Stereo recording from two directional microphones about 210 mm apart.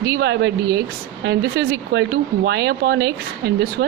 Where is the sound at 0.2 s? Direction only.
55° right (ahead or behind).